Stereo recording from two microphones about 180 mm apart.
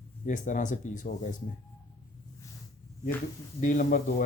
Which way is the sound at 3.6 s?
45° left (ahead or behind).